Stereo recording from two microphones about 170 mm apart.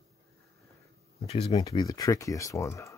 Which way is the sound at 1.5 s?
25° left (ahead or behind).